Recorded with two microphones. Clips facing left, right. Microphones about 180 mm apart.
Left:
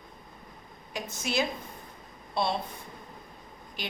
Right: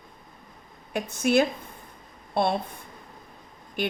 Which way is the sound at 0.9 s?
55° right (ahead or behind).